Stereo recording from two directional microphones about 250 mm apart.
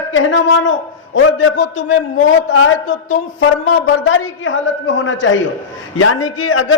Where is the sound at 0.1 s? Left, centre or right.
Left.